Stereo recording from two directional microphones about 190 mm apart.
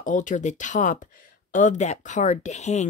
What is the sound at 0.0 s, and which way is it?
A woman's voice, 40° left (ahead or behind).